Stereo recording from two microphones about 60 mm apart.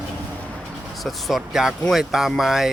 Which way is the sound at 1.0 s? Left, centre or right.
Centre.